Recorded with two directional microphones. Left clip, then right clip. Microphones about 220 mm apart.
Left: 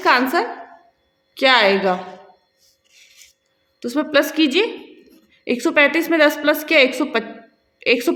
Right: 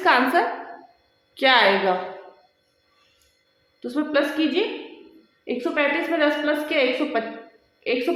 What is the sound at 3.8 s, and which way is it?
A woman's voice, 40° left (ahead or behind).